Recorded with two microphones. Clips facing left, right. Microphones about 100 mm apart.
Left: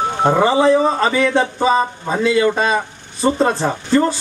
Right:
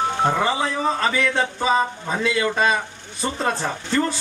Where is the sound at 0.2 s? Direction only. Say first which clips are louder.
Left 10 dB; 30° left (ahead or behind).